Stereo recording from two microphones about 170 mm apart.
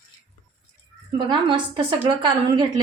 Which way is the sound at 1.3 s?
30° right (ahead or behind).